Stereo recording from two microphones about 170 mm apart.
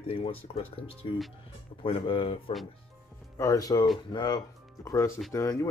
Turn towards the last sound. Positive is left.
turn(degrees=20)  # may be behind; listen again after turning